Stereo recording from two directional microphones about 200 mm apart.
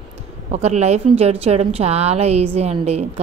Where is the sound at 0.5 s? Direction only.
35° right (ahead or behind).